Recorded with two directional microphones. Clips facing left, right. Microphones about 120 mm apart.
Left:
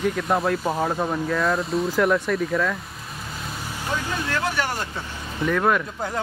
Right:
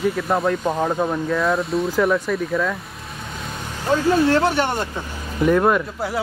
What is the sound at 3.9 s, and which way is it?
Speech, 35° right (ahead or behind).